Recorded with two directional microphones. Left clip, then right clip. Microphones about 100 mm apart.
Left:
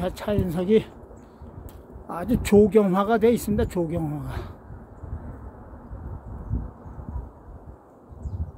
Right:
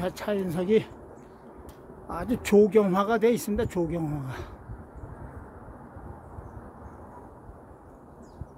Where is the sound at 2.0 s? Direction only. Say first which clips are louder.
Left 3 dB; 35° left (ahead or behind).